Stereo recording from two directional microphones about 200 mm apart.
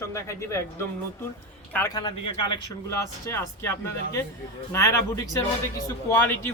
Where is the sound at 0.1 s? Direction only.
15° left (ahead or behind).